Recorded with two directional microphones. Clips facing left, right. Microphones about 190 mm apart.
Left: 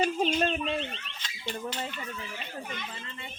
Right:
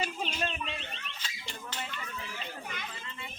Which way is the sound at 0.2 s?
45° left (ahead or behind).